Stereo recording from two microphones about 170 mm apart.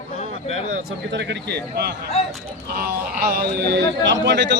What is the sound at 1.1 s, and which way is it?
A man's voice, 90° right.